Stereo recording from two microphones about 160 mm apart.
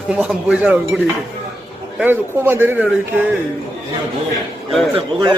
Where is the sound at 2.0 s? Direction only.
10° right (ahead or behind).